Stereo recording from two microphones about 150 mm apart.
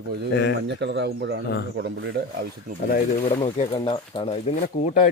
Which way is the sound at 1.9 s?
90° right.